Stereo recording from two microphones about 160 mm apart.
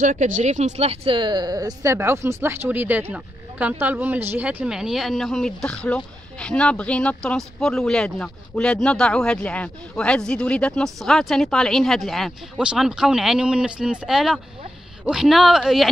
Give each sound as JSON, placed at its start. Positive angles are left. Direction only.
{"t": 0.0, "sound": "speech", "side_deg": -50}